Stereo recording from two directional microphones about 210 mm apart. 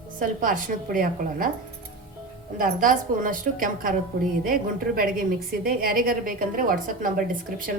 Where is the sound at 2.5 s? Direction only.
40° right (ahead or behind).